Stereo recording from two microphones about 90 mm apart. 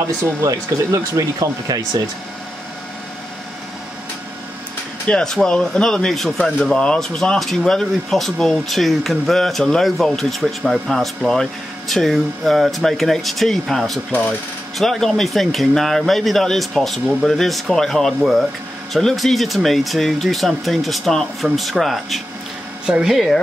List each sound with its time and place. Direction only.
0.0 s speech: 40° right (ahead or behind)
5.0 s a man's voice: 10° left (ahead or behind)